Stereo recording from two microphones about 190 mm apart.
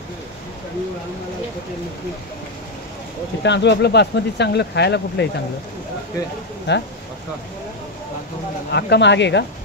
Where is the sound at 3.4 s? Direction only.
65° left (ahead or behind).